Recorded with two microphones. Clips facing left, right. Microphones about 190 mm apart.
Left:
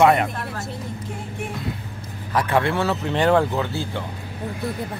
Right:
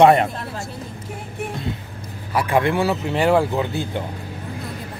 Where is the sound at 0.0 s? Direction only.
30° right (ahead or behind).